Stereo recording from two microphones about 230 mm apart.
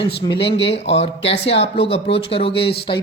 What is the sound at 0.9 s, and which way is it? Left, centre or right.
Speech, left.